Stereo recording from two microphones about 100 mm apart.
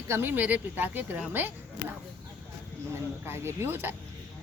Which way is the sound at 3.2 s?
25° right (ahead or behind).